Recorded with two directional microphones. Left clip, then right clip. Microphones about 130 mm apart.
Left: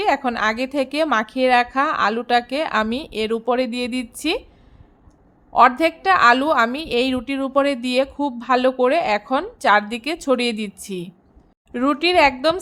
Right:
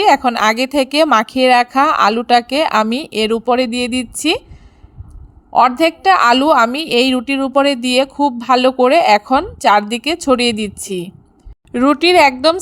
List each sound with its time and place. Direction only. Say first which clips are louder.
0.0 s speech: right 8 dB; 45° right (ahead or behind)
5.5 s speech: right 3 dB; 40° right (ahead or behind)